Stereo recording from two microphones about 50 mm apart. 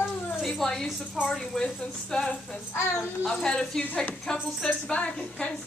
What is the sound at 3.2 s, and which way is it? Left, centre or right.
Speech, centre.